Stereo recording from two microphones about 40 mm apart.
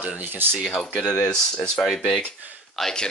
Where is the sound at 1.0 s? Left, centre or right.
Left.